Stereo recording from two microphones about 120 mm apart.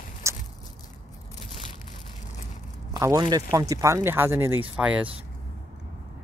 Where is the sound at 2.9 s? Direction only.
30° right (ahead or behind).